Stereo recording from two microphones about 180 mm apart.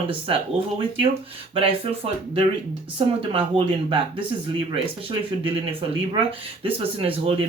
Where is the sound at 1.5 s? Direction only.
30° right (ahead or behind).